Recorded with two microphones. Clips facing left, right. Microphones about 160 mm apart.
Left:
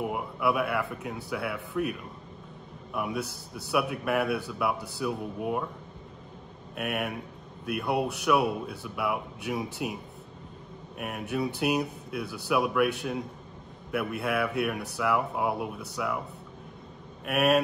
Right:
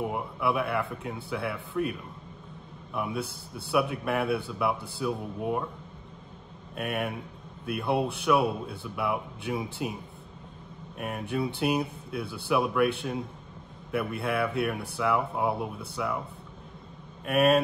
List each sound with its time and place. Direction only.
0.0 s speech: 5° left (ahead or behind)
2.9 s a man's voice: 5° left (ahead or behind)
3.3 s a man's voice: 55° right (ahead or behind)
3.7 s speech: centre (ahead or behind)
6.7 s speech: 5° left (ahead or behind)
11.0 s speech: 5° left (ahead or behind)
13.9 s speech: 5° left (ahead or behind)
17.2 s speech: 5° left (ahead or behind)